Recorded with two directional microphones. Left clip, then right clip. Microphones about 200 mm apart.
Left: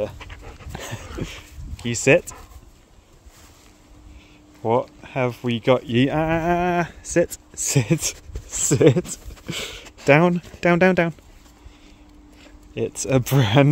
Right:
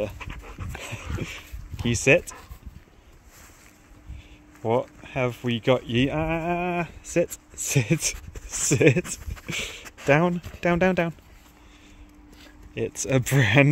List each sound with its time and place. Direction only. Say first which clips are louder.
0.0 s dog: left 3 dB; 15° left (ahead or behind)
4.6 s speech: left 4 dB; 5° left (ahead or behind)
6.1 s speech: left 6 dB; 25° left (ahead or behind)
10.0 s speech: left 5 dB; 25° left (ahead or behind)
12.7 s speech: left 3 dB; 10° left (ahead or behind)